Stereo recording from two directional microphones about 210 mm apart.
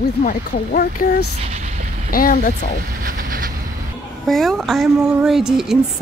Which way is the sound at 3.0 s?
40° right (ahead or behind).